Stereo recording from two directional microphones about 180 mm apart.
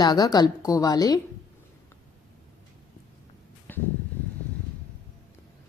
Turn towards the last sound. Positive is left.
turn(degrees=10)  # may be behind; listen again after turning